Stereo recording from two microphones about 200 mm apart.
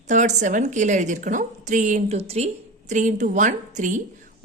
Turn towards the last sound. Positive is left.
turn(degrees=-40)  # may be behind; listen again after turning